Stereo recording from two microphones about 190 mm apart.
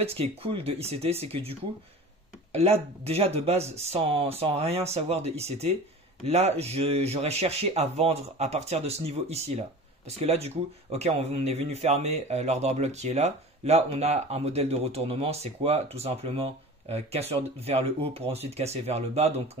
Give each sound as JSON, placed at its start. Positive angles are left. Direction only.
{"t": 0.0, "sound": "speech", "side_deg": -30}
{"t": 2.5, "sound": "speech", "side_deg": -35}